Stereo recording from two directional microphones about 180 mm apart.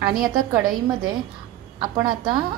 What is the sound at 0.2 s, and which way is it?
A woman's voice, 20° right (ahead or behind).